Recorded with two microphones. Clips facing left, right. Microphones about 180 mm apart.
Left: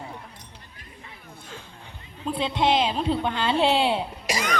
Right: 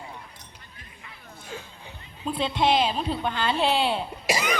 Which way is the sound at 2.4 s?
20° left (ahead or behind).